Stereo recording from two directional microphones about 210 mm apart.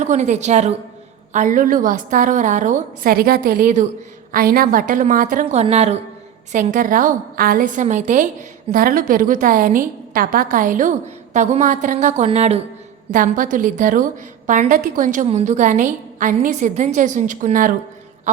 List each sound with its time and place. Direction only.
0.0 s a woman's voice: 35° right (ahead or behind)